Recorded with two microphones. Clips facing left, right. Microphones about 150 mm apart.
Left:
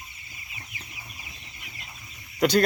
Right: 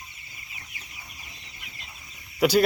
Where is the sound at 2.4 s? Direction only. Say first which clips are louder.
Right 1 dB; 5° right (ahead or behind).